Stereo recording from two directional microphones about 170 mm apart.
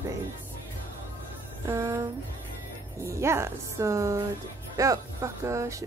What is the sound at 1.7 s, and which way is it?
Speech, 20° right (ahead or behind).